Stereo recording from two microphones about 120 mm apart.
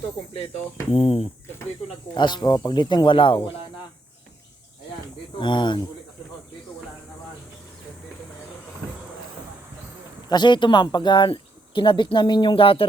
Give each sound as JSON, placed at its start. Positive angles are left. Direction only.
{"t": 0.9, "sound": "speech", "side_deg": 55}
{"t": 2.1, "sound": "speech", "side_deg": 40}
{"t": 5.4, "sound": "speech", "side_deg": 40}
{"t": 10.2, "sound": "speech", "side_deg": 40}